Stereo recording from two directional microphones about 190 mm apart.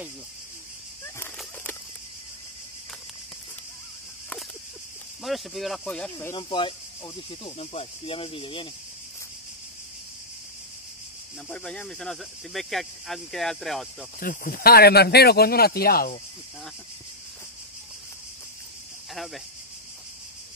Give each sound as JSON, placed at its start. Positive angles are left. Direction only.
{"t": 1.0, "sound": "a sound", "side_deg": 10}
{"t": 5.2, "sound": "speech", "side_deg": 0}
{"t": 6.3, "sound": "speech", "side_deg": 25}
{"t": 11.4, "sound": "speech", "side_deg": 5}
{"t": 14.2, "sound": "speech", "side_deg": 45}
{"t": 19.1, "sound": "speech", "side_deg": 0}